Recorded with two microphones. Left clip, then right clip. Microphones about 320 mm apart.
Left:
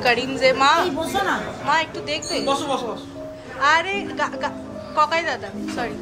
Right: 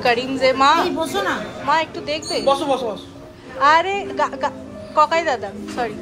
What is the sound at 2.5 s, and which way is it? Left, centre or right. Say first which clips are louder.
Speech: right 6 dB; right.